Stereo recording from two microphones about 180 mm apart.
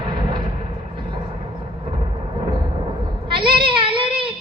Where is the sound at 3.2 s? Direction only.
30° right (ahead or behind).